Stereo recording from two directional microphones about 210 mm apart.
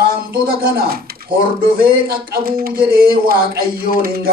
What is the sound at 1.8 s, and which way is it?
Speech, 45° right (ahead or behind).